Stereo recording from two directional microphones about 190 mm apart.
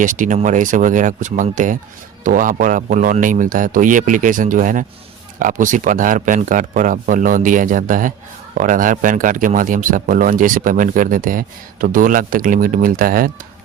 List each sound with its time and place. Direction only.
0.0 s a man's voice: 45° right (ahead or behind)